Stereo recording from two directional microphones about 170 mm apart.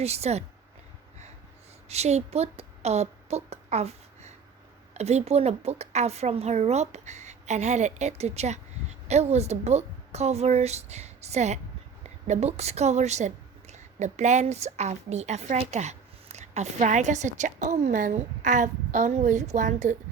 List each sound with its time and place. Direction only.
0.0 s speech: 40° right (ahead or behind)
1.9 s a woman's voice: 40° right (ahead or behind)